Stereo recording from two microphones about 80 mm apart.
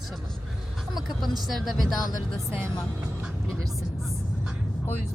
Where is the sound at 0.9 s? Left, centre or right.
Centre.